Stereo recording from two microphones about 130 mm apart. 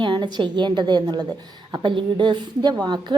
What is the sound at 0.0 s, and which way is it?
A woman's voice, 35° right (ahead or behind).